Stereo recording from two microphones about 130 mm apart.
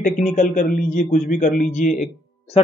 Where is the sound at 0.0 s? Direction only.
75° left (ahead or behind).